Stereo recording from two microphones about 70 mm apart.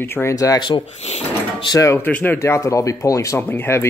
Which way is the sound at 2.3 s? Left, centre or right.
Left.